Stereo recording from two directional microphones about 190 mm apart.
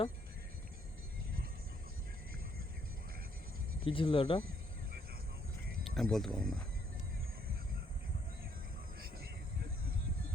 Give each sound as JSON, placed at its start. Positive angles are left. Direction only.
{"t": 3.8, "sound": "speech", "side_deg": 25}
{"t": 5.8, "sound": "speech", "side_deg": 0}